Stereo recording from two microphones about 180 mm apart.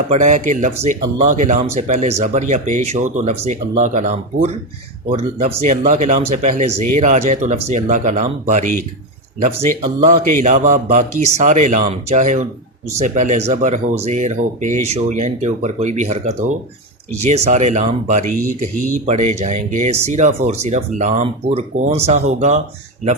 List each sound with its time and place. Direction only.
0.1 s speech: 45° right (ahead or behind)
10.2 s speech: 45° right (ahead or behind)